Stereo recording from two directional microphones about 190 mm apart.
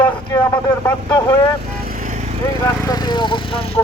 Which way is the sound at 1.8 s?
45° right (ahead or behind).